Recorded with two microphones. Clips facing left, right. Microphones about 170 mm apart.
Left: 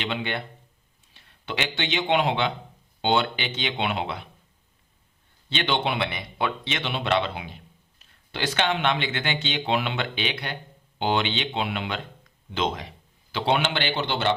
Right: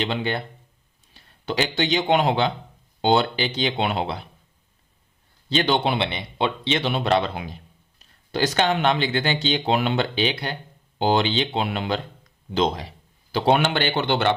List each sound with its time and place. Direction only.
0.0 s speech: 35° right (ahead or behind)
5.5 s a man's voice: 40° right (ahead or behind); by 14.3 s 55° right (ahead or behind)